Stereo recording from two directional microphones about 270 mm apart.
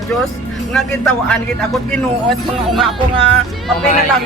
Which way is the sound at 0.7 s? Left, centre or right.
Centre.